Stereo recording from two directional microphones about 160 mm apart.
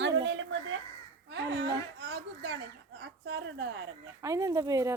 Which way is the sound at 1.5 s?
90° right.